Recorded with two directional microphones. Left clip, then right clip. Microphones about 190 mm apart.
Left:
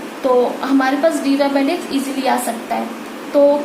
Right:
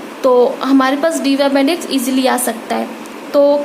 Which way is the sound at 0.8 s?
50° right (ahead or behind).